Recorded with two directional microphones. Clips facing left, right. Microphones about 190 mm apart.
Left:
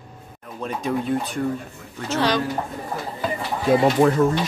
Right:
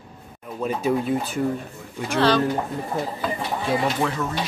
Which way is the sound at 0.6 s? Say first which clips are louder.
Right 2 dB; 5° right (ahead or behind).